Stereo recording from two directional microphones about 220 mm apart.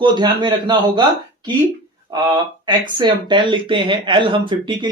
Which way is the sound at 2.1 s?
20° right (ahead or behind).